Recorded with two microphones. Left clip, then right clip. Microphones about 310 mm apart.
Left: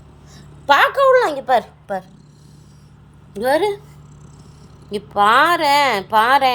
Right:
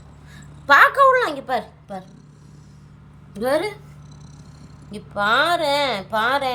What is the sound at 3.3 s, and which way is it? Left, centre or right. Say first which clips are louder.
Speech: left 4 dB; centre.